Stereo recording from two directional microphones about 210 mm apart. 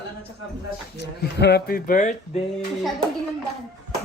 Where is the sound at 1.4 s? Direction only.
50° left (ahead or behind).